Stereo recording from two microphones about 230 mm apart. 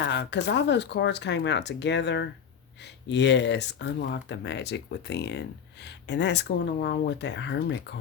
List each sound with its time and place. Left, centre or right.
0.0 s speech: left